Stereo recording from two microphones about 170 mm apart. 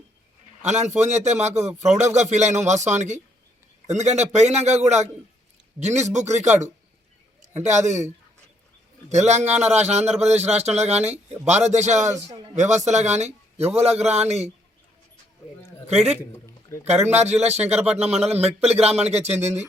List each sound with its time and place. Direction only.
0.6 s a man's voice: 45° right (ahead or behind)
12.1 s a man's voice: 20° right (ahead or behind)
12.5 s a man's voice: 45° right (ahead or behind)
16.8 s speech: 40° right (ahead or behind)